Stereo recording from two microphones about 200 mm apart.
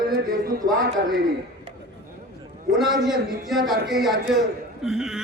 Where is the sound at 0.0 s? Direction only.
45° right (ahead or behind).